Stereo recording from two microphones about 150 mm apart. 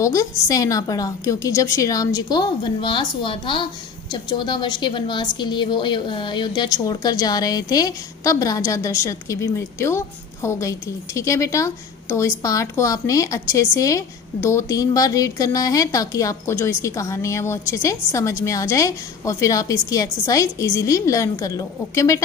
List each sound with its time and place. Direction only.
0.0 s a woman's voice: 20° left (ahead or behind)